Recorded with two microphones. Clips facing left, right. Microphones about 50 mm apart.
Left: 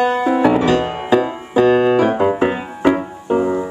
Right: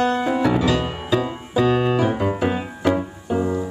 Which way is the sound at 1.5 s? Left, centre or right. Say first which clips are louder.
Left 6 dB; left.